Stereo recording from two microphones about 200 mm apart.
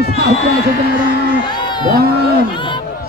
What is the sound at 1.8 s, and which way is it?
Speech, 45° right (ahead or behind).